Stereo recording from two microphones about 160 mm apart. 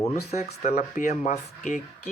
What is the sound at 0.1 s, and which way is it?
Speech, 45° left (ahead or behind).